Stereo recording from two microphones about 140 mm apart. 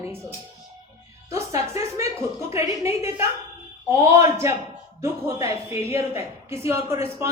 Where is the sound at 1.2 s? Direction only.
20° right (ahead or behind).